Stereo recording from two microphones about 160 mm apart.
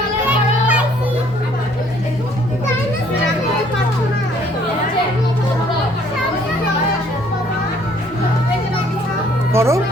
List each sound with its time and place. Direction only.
0.3 s children playing: 10° right (ahead or behind)
9.5 s music: 15° right (ahead or behind)